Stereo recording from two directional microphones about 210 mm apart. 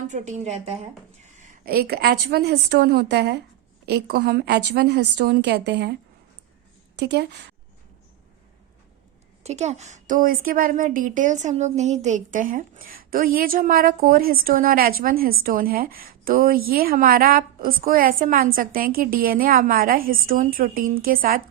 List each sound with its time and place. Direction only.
0.1 s a woman's voice: 35° right (ahead or behind); by 6.0 s 50° right (ahead or behind)
7.0 s a woman's voice: 50° right (ahead or behind)
9.4 s a woman's voice: 30° right (ahead or behind)